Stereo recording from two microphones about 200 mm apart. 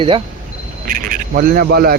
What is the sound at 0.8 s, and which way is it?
A man's voice, 45° right (ahead or behind).